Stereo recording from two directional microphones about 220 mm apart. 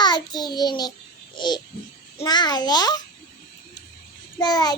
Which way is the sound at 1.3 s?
20° left (ahead or behind).